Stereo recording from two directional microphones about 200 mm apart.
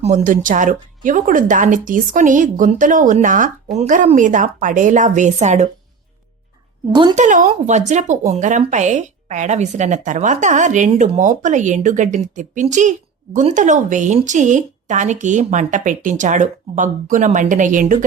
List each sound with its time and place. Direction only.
0.0 s a woman's voice: 35° right (ahead or behind)
6.9 s a woman's voice: 20° right (ahead or behind)
7.2 s a woman's voice: 40° right (ahead or behind)